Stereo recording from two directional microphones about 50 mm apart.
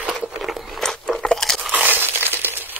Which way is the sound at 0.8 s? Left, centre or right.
Centre.